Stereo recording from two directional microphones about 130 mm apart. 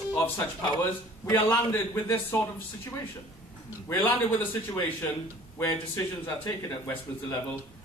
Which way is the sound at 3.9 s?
15° left (ahead or behind).